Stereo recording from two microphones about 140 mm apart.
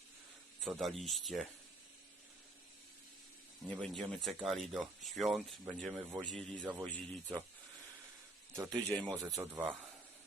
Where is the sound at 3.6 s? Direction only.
Centre (ahead or behind).